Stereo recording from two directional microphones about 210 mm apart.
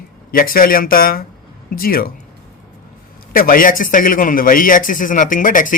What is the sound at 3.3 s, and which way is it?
A man's voice, 45° left (ahead or behind).